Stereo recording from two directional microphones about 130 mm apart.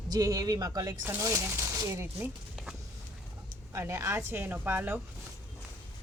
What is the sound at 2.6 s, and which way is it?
Vehicle, 5° right (ahead or behind).